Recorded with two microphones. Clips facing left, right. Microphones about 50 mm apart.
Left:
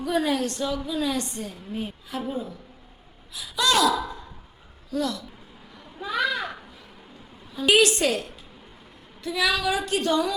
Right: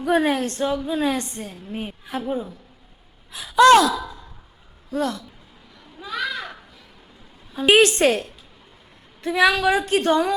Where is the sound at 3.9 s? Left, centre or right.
Left.